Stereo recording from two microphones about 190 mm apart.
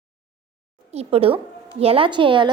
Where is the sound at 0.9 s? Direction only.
35° right (ahead or behind).